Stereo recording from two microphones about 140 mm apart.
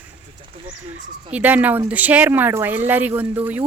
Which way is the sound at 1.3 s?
10° right (ahead or behind).